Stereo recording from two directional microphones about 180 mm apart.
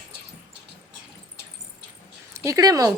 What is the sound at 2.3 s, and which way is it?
Speech, 15° right (ahead or behind).